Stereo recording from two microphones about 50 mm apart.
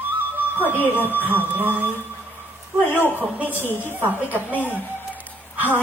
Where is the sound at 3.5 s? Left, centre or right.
Left.